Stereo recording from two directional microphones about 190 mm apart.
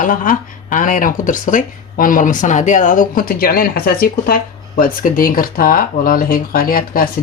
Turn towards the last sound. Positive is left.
turn(degrees=50)  # may be behind; listen again after turning